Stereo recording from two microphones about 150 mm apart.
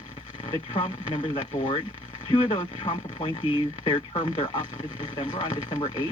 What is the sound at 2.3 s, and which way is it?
Speech, 35° left (ahead or behind).